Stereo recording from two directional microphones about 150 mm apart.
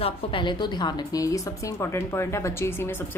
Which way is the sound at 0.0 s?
35° left (ahead or behind).